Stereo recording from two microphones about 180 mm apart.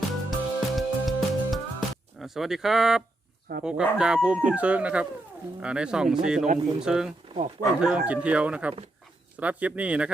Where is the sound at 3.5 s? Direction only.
60° right (ahead or behind).